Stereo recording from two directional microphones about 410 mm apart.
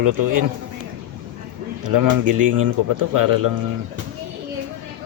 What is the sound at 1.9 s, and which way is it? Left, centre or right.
Speech, right.